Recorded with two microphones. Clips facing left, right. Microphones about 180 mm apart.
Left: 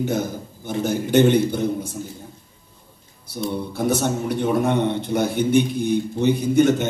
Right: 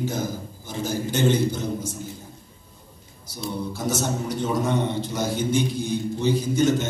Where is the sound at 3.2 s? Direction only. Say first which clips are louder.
Left 4 dB; 60° left (ahead or behind).